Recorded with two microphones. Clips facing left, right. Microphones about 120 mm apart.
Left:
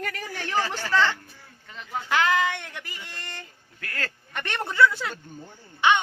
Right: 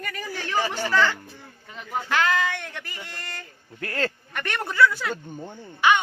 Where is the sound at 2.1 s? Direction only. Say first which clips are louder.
Left 1 dB; 20° left (ahead or behind).